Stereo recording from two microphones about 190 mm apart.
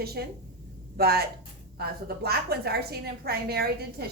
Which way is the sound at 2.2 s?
55° right (ahead or behind).